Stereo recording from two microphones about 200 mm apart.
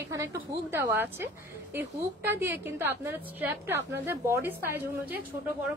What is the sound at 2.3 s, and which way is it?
Speech, 10° right (ahead or behind).